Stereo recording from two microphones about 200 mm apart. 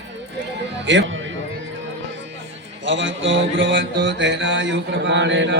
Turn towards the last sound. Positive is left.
turn(degrees=-65)  # may be behind; listen again after turning